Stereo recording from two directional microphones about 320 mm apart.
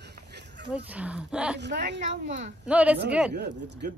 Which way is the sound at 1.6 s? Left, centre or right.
Right.